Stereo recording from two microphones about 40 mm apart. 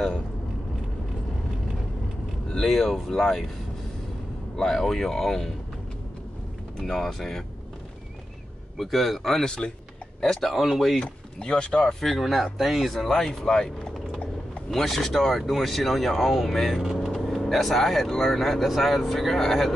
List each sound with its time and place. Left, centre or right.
2.7 s speech: centre
4.6 s speech: centre
6.8 s speech: centre
8.7 s speech: centre
11.0 s speech: left
11.7 s speech: centre
12.5 s speech: centre
13.1 s speech: centre